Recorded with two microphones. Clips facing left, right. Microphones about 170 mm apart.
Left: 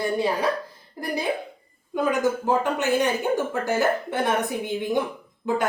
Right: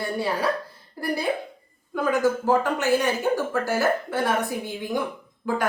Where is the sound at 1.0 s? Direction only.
20° left (ahead or behind).